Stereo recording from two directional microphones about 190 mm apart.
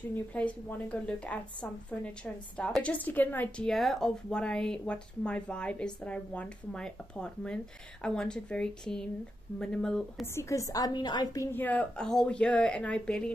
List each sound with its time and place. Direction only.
0.1 s a woman's voice: 5° left (ahead or behind)
10.3 s a woman's voice: 15° left (ahead or behind)
11.5 s a woman's voice: 10° left (ahead or behind)